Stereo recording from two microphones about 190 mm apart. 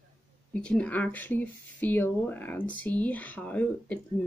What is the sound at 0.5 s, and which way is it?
Speech, 5° left (ahead or behind).